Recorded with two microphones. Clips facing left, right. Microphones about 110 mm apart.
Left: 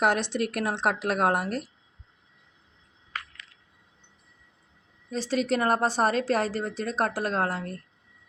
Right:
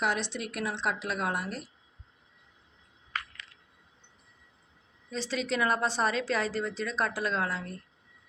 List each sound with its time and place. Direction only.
0.0 s speech: 55° left (ahead or behind)
5.1 s a woman's voice: 45° left (ahead or behind)